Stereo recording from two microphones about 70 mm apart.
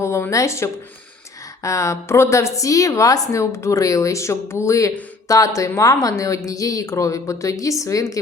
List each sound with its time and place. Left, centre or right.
0.0 s a woman's voice: left